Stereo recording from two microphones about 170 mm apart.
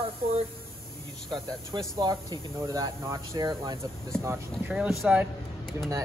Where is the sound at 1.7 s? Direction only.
25° right (ahead or behind).